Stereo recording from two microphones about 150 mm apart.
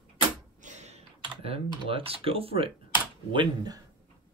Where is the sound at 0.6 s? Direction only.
50° right (ahead or behind).